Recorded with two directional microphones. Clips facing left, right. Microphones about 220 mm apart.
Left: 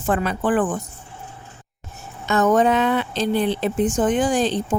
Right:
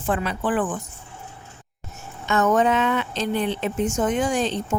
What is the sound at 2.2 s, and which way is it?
Speech, 35° left (ahead or behind).